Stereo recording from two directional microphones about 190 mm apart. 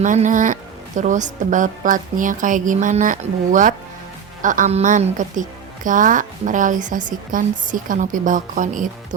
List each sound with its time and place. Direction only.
0.0 s a woman's voice: 40° right (ahead or behind)